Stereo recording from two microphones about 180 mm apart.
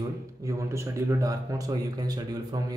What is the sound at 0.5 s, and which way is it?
Speech, 15° right (ahead or behind).